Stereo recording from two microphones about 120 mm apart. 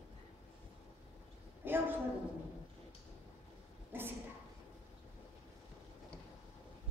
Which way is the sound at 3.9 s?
20° right (ahead or behind).